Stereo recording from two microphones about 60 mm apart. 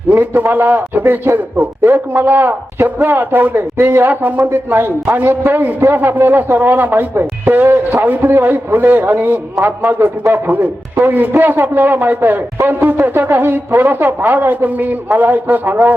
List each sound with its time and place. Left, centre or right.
0.2 s a man's voice: right
9.6 s a man's voice: right
9.9 s a man's voice: right